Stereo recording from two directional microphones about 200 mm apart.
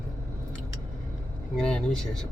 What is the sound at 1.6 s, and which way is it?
Speech, 5° left (ahead or behind).